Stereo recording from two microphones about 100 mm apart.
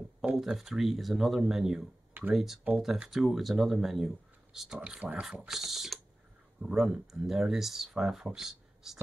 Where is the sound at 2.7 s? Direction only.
5° right (ahead or behind).